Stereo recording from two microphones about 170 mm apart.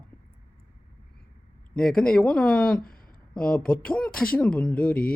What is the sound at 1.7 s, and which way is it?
Speech, 5° left (ahead or behind).